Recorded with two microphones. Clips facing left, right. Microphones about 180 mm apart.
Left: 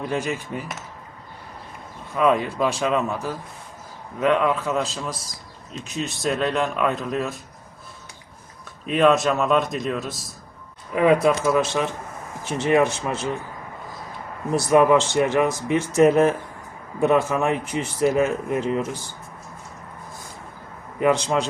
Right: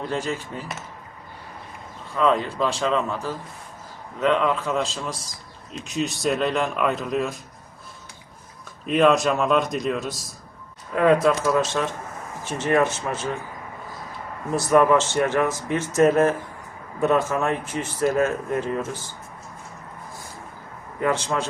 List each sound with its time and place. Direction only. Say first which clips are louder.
0.1 s speech: left 1 dB; 15° left (ahead or behind)
2.1 s speech: left 1 dB; 10° left (ahead or behind)
8.9 s speech: even; centre (ahead or behind)
14.5 s speech: left 1 dB; 15° left (ahead or behind)
21.0 s speech: left 4 dB; 15° left (ahead or behind)